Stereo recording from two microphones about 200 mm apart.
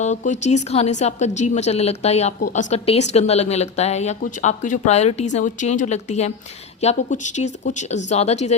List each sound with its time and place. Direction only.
0.0 s a woman's voice: 35° left (ahead or behind)